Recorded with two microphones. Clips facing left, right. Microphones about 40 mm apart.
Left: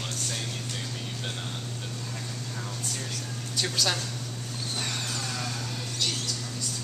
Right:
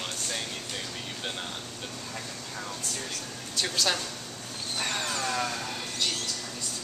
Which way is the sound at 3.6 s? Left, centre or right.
Centre.